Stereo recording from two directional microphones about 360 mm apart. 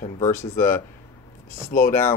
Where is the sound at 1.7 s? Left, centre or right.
Left.